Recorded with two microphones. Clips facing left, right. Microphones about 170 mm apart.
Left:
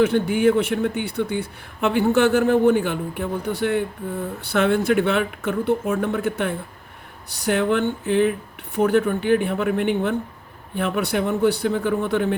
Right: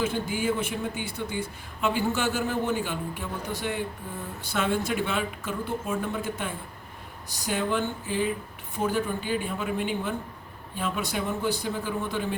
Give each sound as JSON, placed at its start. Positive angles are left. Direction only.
{"t": 0.0, "sound": "speech", "side_deg": 65}